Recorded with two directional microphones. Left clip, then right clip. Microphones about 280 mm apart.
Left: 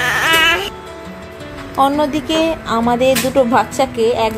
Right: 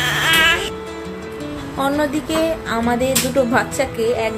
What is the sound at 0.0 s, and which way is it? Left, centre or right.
Music, centre.